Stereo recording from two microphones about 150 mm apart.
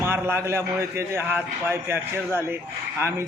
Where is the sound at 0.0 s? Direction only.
15° right (ahead or behind).